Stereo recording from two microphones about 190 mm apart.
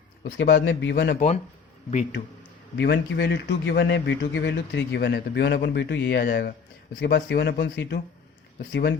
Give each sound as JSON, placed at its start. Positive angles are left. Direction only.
{"t": 0.3, "sound": "a man's voice", "side_deg": 65}
{"t": 2.7, "sound": "a man's voice", "side_deg": 65}